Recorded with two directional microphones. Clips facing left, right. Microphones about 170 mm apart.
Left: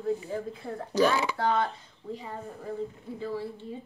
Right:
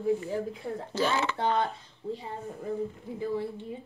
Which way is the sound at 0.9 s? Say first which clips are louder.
Left 4 dB; 15° left (ahead or behind).